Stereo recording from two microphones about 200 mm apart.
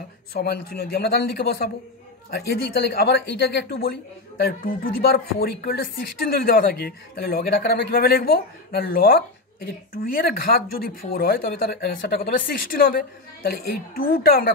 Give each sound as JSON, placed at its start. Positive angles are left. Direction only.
{"t": 0.3, "sound": "speech", "side_deg": 50}